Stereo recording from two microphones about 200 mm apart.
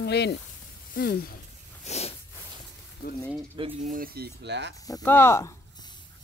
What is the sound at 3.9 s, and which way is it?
Speech, 45° right (ahead or behind).